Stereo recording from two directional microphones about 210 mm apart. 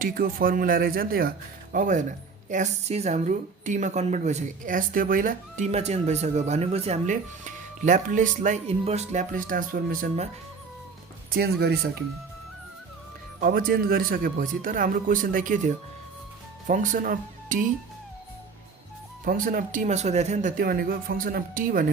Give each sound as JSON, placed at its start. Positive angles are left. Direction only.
{"t": 0.0, "sound": "a woman's voice", "side_deg": -40}
{"t": 11.3, "sound": "speech", "side_deg": -50}
{"t": 13.4, "sound": "a woman's voice", "side_deg": -45}
{"t": 19.2, "sound": "a woman's voice", "side_deg": -40}